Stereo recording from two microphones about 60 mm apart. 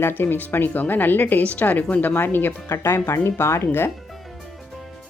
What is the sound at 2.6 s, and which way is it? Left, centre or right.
Speech, left.